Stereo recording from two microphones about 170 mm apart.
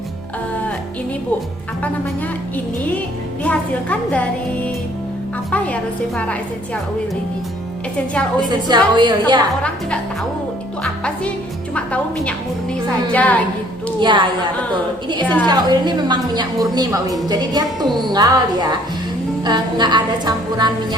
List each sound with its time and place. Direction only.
3.4 s a woman's voice: 5° left (ahead or behind)
8.4 s a woman's voice: 25° right (ahead or behind)
11.7 s a woman's voice: 5° left (ahead or behind)
14.0 s a woman's voice: 30° right (ahead or behind)